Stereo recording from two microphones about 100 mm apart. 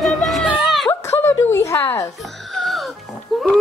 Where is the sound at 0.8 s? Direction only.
25° left (ahead or behind).